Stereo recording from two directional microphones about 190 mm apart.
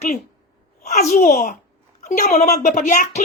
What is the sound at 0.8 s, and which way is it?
Speech, 40° left (ahead or behind).